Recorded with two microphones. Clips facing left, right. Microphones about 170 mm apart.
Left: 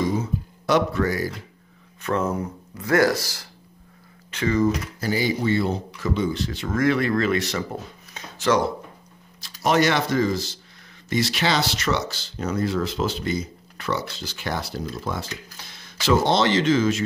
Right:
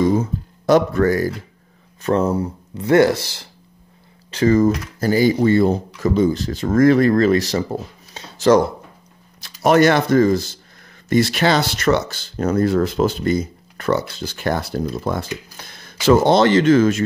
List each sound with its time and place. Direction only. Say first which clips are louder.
0.1 s a sound: right 6 dB; 50° right (ahead or behind)
2.0 s speech: right 6 dB; 35° right (ahead or behind)
4.3 s speech: right 6 dB; 40° right (ahead or behind)
9.4 s speech: right 6 dB; 55° right (ahead or behind)